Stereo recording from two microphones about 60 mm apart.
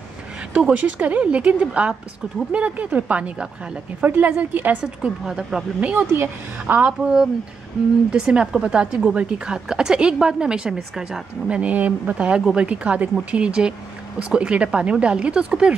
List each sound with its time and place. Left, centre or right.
0.6 s speech: right
5.2 s a woman's voice: centre
5.8 s speech: right
6.9 s a woman's voice: centre